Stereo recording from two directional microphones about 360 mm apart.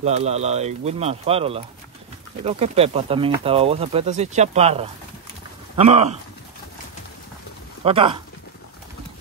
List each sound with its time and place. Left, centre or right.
0.0 s speech: centre
7.8 s speech: centre